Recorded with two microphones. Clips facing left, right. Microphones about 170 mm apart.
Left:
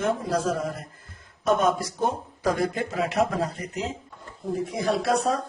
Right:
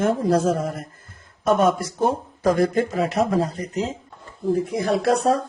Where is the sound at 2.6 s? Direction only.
45° right (ahead or behind).